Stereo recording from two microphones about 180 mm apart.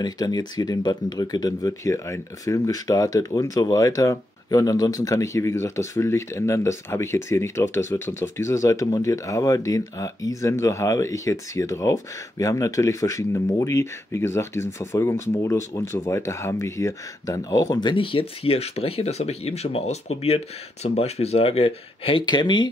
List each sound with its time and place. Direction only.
0.0 s speech: 20° left (ahead or behind)